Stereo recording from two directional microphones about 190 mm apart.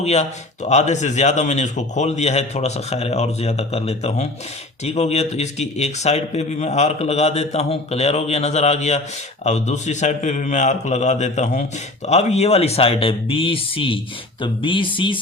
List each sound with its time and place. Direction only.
0.0 s speech: 35° left (ahead or behind)